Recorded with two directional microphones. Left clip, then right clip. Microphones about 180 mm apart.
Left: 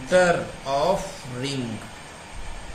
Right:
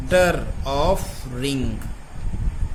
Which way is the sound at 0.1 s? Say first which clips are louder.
Right 1 dB; 55° right (ahead or behind).